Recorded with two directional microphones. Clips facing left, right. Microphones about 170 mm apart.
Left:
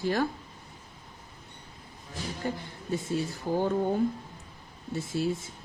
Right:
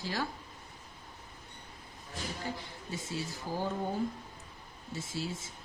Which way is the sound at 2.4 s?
55° left (ahead or behind).